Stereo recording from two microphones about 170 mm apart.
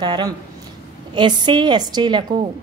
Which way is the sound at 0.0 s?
25° right (ahead or behind).